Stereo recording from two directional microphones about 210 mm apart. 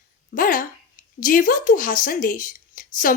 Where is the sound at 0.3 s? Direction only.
40° left (ahead or behind).